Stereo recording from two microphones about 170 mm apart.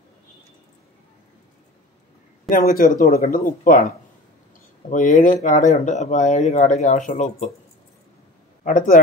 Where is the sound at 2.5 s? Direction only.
60° left (ahead or behind).